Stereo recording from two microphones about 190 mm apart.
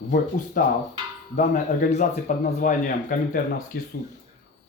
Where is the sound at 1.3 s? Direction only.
45° left (ahead or behind).